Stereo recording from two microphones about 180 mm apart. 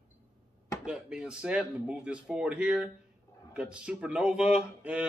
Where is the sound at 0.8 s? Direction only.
5° right (ahead or behind).